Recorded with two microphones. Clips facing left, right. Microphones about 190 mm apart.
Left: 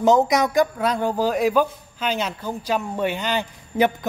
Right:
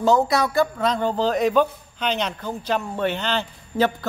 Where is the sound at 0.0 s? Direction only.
20° left (ahead or behind).